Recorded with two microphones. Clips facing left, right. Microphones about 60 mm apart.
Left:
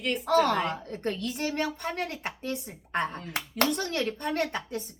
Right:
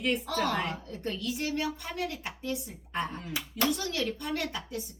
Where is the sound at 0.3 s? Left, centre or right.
Left.